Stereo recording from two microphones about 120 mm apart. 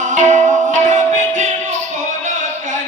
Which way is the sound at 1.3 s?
85° right.